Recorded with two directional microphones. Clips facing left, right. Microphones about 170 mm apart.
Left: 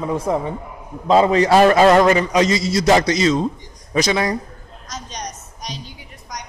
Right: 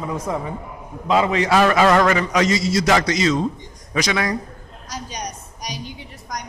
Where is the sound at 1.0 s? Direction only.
35° left (ahead or behind).